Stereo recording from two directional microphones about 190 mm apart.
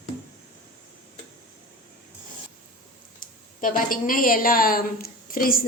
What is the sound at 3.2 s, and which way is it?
A woman's voice, 45° left (ahead or behind).